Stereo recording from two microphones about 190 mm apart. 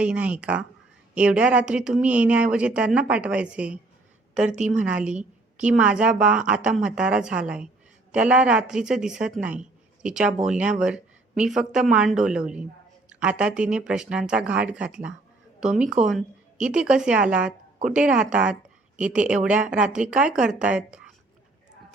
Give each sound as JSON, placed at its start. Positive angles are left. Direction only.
{"t": 0.0, "sound": "a woman's voice", "side_deg": -5}
{"t": 4.4, "sound": "a woman's voice", "side_deg": -40}
{"t": 4.8, "sound": "a woman's voice", "side_deg": -5}